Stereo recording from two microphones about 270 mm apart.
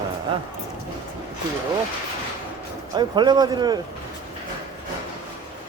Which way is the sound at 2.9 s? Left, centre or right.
Centre.